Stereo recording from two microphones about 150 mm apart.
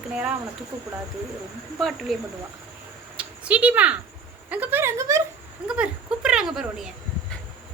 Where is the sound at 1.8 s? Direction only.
Centre (ahead or behind).